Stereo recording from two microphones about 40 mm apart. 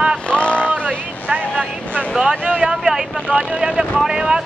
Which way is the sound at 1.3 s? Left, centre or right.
Right.